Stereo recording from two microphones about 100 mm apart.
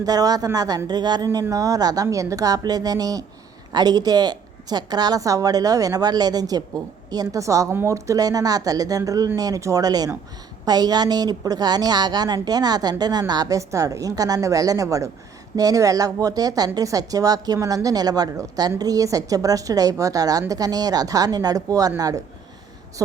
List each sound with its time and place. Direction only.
0.0 s a woman's voice: 40° right (ahead or behind)